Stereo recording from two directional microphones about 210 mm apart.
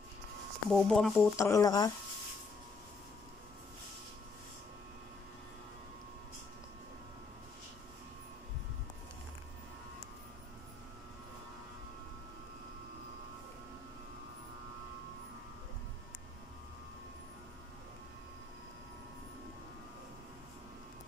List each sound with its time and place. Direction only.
0.7 s speech: centre (ahead or behind)
1.3 s speech: 15° left (ahead or behind)